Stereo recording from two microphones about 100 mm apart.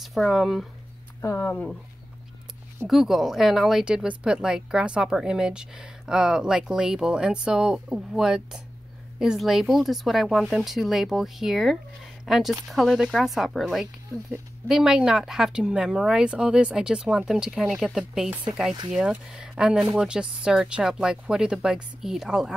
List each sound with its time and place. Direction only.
0.0 s speech: centre (ahead or behind)
1.2 s speech: 20° left (ahead or behind)
2.9 s a woman's voice: 5° right (ahead or behind)